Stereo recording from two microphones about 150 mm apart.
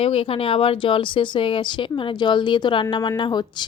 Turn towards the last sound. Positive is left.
turn(degrees=30)  # may be behind; listen again after turning